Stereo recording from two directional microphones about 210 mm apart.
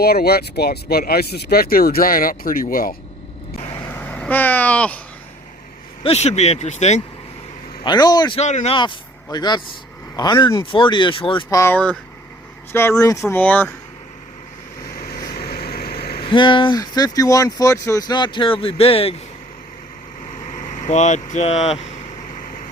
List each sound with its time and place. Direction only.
0.0 s speech: 50° left (ahead or behind)
3.8 s vehicle: 10° left (ahead or behind)
6.0 s speech: 30° left (ahead or behind)
7.9 s speech: 20° left (ahead or behind)
8.4 s speech: 35° left (ahead or behind); by 11.9 s 10° left (ahead or behind)
13.0 s speech: 15° left (ahead or behind)
15.4 s vehicle: 50° left (ahead or behind)
16.2 s speech: 25° left (ahead or behind)
20.6 s speech: 35° left (ahead or behind)